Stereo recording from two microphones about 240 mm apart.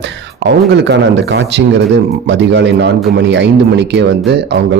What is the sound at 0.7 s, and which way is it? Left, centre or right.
Speech, right.